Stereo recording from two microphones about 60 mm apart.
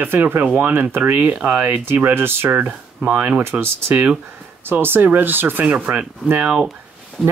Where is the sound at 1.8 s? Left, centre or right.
Right.